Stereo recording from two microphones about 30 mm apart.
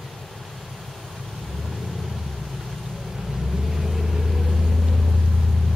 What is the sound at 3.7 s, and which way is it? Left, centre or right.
Vehicle, centre.